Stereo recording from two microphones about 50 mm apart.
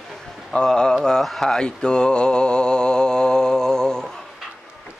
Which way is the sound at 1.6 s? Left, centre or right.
Centre.